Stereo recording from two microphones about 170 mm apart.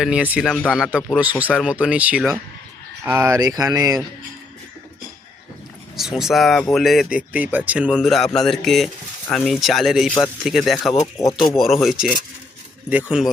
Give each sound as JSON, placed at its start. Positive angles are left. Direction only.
{"t": 0.0, "sound": "speech", "side_deg": -5}
{"t": 6.0, "sound": "speech", "side_deg": 0}
{"t": 11.0, "sound": "speech", "side_deg": 20}
{"t": 11.5, "sound": "speech", "side_deg": 0}